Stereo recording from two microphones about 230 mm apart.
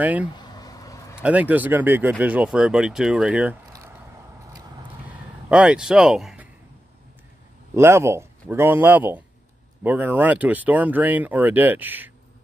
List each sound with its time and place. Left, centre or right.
0.0 s speech: centre
0.3 s a sound: centre
1.2 s speech: centre
5.5 s speech: centre
7.7 s speech: centre